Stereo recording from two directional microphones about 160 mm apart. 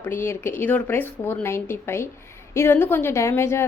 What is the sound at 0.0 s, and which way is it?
A woman's voice, 15° left (ahead or behind).